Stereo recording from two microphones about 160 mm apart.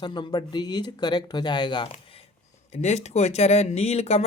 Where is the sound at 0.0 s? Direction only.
30° left (ahead or behind).